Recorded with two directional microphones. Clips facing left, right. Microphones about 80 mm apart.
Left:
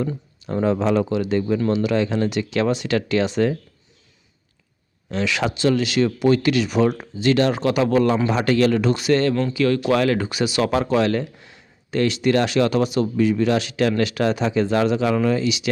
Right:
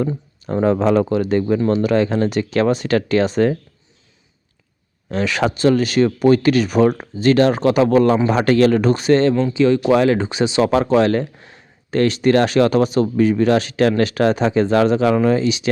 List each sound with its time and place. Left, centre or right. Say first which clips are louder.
0.4 s speech: right 4 dB; right
5.1 s speech: right 4 dB; right
9.5 s speech: right 4 dB; right